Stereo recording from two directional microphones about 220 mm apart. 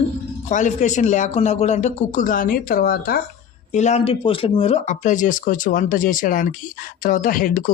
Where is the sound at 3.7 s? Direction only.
30° left (ahead or behind).